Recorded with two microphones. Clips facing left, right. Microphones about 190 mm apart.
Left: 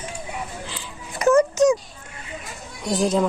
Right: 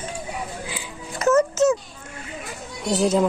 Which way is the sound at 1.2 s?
15° left (ahead or behind).